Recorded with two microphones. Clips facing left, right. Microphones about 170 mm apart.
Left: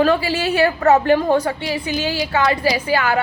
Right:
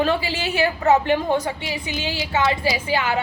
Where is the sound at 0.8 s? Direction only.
50° left (ahead or behind).